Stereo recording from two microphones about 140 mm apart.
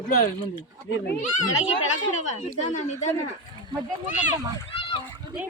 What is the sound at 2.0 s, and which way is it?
Speech, 70° left (ahead or behind).